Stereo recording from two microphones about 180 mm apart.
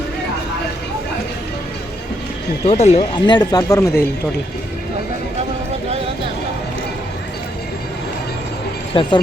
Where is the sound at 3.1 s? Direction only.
25° left (ahead or behind).